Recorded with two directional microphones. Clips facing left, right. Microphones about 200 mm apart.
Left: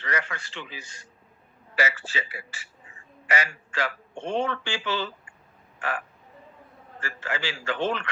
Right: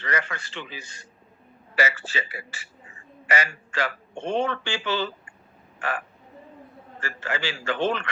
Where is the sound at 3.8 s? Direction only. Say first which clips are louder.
Right 2 dB; 65° right (ahead or behind).